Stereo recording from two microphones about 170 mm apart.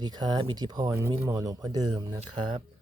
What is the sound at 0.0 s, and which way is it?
A man's voice, 25° right (ahead or behind).